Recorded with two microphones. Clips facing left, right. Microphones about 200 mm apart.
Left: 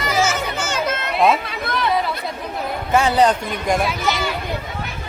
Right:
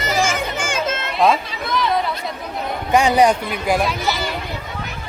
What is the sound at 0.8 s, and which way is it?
Music, 25° right (ahead or behind).